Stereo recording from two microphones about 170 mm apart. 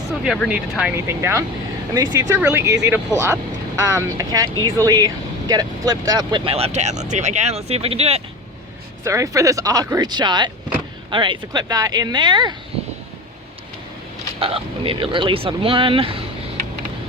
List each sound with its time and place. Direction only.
0.4 s speech: 5° right (ahead or behind); by 8.2 s 35° right (ahead or behind)
9.0 s speech: 20° right (ahead or behind)
14.3 s speech: 35° right (ahead or behind)